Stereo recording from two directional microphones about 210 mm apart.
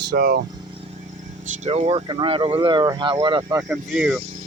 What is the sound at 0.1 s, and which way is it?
Speech, 50° right (ahead or behind).